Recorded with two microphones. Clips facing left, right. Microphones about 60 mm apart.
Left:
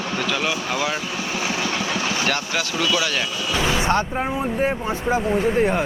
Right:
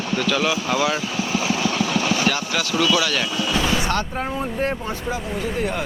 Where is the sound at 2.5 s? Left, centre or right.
Left; by 4.9 s centre.